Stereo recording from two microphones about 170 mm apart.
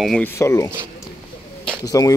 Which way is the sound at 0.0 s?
5° left (ahead or behind).